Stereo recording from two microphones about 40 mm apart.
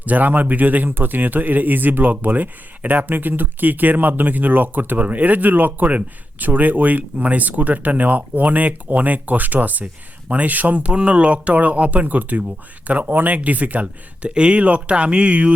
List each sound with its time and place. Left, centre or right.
0.0 s a man's voice: right
10.8 s speech: right